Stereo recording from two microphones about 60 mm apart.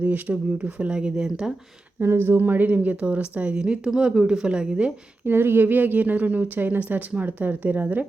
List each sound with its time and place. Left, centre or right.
0.0 s a woman's voice: right
0.9 s speech: centre
2.0 s a woman's voice: right; by 4.9 s centre
5.2 s a woman's voice: right